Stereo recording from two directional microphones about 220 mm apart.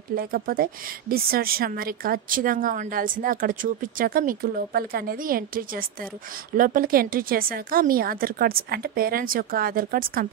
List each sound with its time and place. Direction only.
0.1 s a woman's voice: 40° right (ahead or behind)